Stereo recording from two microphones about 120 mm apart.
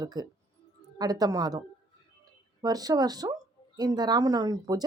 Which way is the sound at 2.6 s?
30° right (ahead or behind).